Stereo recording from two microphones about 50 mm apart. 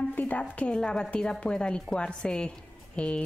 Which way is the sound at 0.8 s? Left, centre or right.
Centre.